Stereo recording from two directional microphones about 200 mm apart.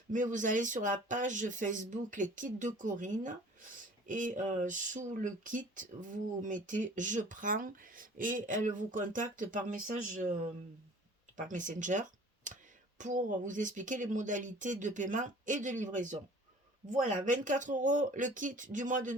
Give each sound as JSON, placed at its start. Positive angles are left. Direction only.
{"t": 0.1, "sound": "speech", "side_deg": -40}
{"t": 11.3, "sound": "speech", "side_deg": -40}
{"t": 12.5, "sound": "a sound", "side_deg": -40}
{"t": 13.0, "sound": "speech", "side_deg": -40}